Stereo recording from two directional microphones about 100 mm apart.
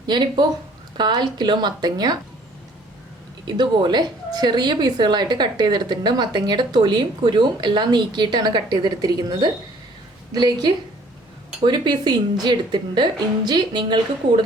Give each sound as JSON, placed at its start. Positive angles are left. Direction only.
{"t": 0.1, "sound": "a woman's voice", "side_deg": -50}
{"t": 3.4, "sound": "a woman's voice", "side_deg": -45}